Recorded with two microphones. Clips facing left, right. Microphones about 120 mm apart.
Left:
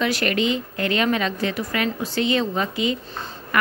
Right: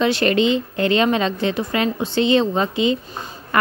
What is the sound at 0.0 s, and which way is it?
Speech, 25° right (ahead or behind).